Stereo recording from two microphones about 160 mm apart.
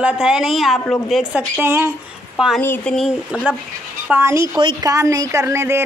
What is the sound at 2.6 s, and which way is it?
Speech, 15° left (ahead or behind).